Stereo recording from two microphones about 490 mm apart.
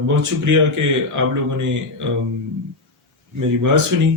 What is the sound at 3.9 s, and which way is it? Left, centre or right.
Speech, right.